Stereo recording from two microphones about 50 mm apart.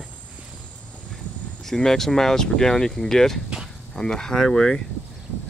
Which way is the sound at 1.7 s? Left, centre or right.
Centre.